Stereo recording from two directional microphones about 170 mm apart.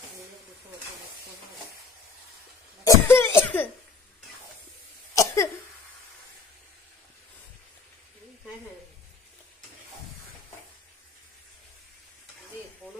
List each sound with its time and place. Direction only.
2.8 s cough: 15° left (ahead or behind)
5.1 s cough: 20° left (ahead or behind)